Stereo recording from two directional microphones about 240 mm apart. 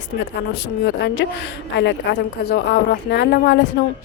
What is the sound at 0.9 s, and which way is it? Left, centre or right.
Speech, left.